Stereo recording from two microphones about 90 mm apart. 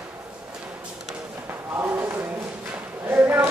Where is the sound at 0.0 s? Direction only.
15° right (ahead or behind).